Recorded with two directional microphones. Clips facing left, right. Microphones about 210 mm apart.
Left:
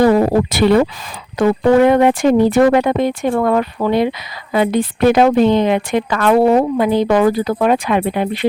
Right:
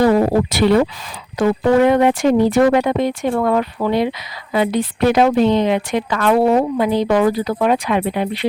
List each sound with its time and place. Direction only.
0.5 s a woman's voice: 55° left (ahead or behind)